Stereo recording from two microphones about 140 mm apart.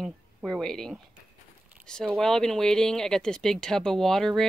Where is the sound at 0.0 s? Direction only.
Centre (ahead or behind).